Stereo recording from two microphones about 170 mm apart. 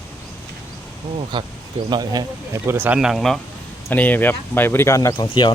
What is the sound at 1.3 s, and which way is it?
Speech, 25° right (ahead or behind).